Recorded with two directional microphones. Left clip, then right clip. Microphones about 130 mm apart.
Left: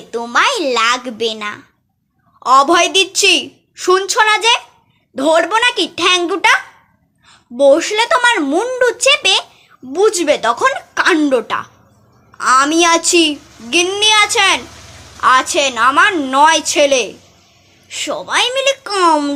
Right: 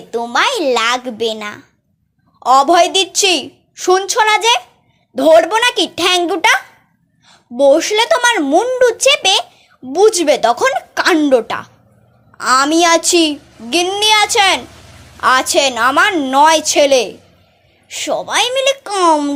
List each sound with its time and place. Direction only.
0.1 s a woman's voice: 25° right (ahead or behind)